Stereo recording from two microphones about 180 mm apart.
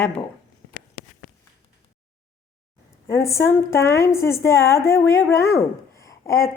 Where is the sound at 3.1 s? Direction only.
15° left (ahead or behind).